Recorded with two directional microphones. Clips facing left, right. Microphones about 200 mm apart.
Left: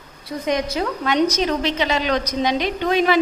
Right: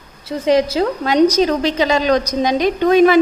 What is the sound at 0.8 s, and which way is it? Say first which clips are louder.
A woman's voice: right 6 dB; 35° right (ahead or behind).